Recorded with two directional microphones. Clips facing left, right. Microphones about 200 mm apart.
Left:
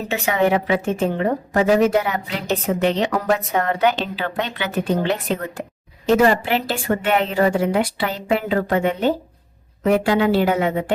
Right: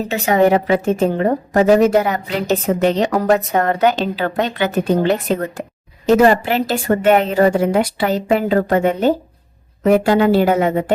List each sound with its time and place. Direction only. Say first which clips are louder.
0.1 s a woman's voice: right 5 dB; 40° right (ahead or behind)